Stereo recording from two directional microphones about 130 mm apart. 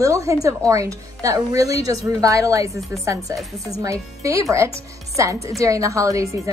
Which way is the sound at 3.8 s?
25° right (ahead or behind).